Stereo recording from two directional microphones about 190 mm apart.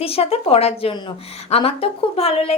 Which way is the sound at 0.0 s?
30° left (ahead or behind).